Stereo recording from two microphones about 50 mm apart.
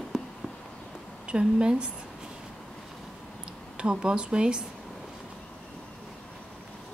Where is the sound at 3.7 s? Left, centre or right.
Centre.